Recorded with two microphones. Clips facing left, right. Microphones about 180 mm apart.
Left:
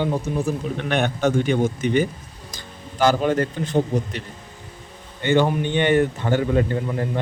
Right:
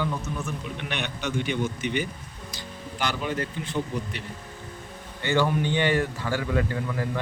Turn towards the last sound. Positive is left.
turn(degrees=30)  # may be behind; listen again after turning